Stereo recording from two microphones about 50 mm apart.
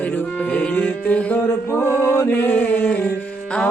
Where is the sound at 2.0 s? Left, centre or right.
Left.